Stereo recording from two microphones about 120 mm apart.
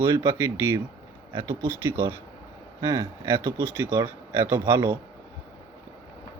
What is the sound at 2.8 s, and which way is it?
Speech, 30° right (ahead or behind).